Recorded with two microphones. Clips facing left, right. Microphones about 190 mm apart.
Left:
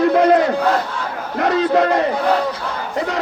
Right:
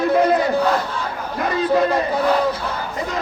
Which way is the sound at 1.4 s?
80° left.